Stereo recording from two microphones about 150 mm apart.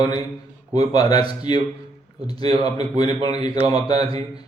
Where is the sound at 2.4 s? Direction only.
40° right (ahead or behind).